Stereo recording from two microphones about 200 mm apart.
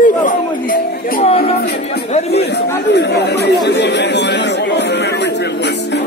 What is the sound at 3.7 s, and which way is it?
Speech, 60° left (ahead or behind).